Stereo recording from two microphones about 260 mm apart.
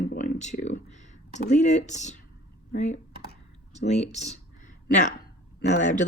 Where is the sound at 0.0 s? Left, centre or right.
Left.